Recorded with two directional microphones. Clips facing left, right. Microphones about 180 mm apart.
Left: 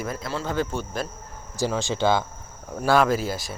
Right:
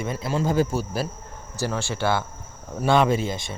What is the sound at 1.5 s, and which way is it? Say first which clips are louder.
Speech: left 2 dB; 15° left (ahead or behind).